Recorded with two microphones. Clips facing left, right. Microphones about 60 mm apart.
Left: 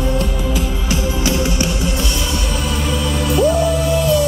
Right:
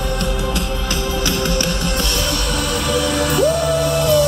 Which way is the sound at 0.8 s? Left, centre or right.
Centre.